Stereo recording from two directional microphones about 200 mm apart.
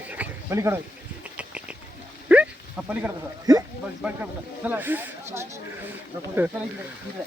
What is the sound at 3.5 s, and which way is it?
Speech, 20° right (ahead or behind).